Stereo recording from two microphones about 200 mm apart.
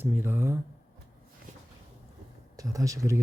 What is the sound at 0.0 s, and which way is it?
Speech, 10° right (ahead or behind).